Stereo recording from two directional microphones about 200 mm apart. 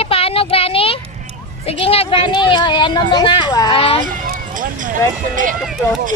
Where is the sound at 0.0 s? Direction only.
30° left (ahead or behind).